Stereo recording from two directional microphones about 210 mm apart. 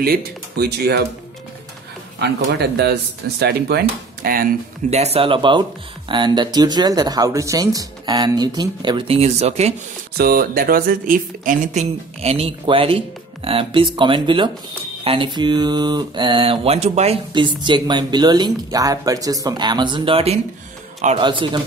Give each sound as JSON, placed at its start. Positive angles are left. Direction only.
{"t": 0.0, "sound": "speech", "side_deg": -50}
{"t": 2.1, "sound": "speech", "side_deg": -50}
{"t": 10.1, "sound": "speech", "side_deg": -45}